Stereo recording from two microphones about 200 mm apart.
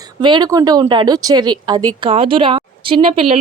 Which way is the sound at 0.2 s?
20° right (ahead or behind).